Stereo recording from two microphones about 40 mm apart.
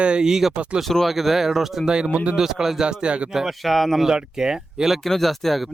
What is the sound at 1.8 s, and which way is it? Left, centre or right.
Speech, right.